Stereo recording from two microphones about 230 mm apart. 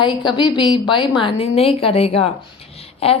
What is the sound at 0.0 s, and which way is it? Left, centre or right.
A woman's voice, left.